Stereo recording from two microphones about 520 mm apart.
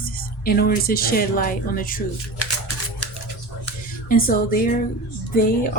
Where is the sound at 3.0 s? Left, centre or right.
Left.